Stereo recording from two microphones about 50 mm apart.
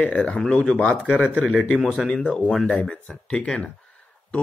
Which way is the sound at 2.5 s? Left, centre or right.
Centre.